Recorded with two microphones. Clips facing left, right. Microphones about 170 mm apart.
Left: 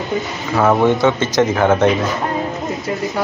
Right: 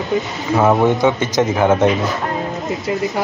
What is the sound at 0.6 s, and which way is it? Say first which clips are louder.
A man's voice: even; 15° right (ahead or behind).